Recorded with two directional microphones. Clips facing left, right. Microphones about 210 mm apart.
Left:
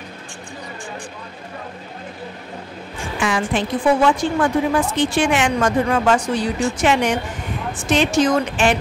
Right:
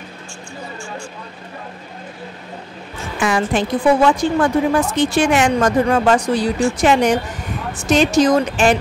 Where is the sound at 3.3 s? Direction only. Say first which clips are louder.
Right 3 dB; 45° right (ahead or behind).